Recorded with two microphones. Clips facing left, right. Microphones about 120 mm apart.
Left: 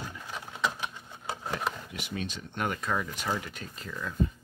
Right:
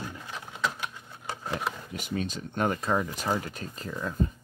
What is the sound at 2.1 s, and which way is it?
Speech, 35° right (ahead or behind).